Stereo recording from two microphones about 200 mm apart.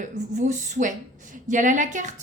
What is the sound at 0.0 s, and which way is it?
A woman's voice, 35° right (ahead or behind).